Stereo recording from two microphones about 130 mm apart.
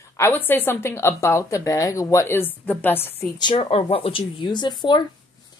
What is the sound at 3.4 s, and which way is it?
Speech, 40° left (ahead or behind).